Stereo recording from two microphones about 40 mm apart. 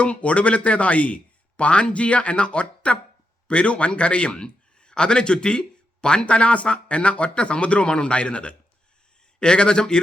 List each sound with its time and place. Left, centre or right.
0.0 s a man's voice: left